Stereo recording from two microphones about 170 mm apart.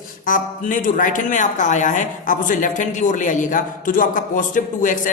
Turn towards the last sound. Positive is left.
turn(degrees=50)  # may be behind; listen again after turning